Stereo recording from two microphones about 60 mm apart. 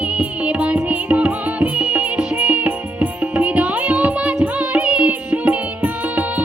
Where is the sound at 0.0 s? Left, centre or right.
Right.